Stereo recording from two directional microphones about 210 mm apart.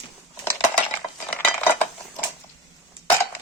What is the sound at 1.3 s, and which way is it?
Cutlery, 10° left (ahead or behind).